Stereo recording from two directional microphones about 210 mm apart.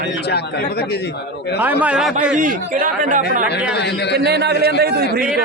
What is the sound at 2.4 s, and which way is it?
Speech, 40° right (ahead or behind).